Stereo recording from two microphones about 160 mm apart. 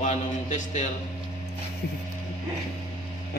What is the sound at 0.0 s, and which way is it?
Speech, 50° left (ahead or behind).